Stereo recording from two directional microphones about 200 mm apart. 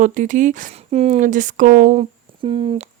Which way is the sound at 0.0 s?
40° right (ahead or behind).